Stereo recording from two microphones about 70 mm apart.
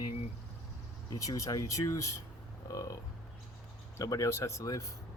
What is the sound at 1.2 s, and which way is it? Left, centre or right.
Speech, left.